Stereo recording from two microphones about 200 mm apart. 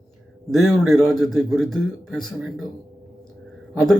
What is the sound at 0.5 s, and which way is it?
A man's voice, centre (ahead or behind).